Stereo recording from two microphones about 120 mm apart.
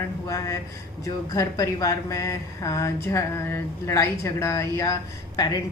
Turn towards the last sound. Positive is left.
turn(degrees=30)  # may be behind; listen again after turning